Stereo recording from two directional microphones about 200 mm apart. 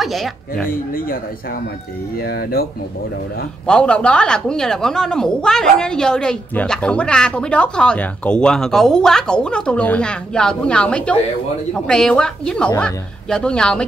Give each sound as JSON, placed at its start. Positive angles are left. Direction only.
{"t": 0.0, "sound": "speech", "side_deg": 0}
{"t": 0.7, "sound": "speech", "side_deg": 45}
{"t": 2.2, "sound": "speech", "side_deg": 50}
{"t": 3.6, "sound": "speech", "side_deg": 5}